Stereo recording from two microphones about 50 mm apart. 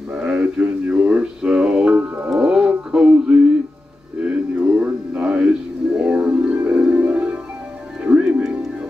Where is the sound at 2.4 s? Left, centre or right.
Centre.